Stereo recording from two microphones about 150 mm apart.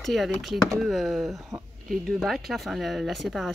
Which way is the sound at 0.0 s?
Centre (ahead or behind).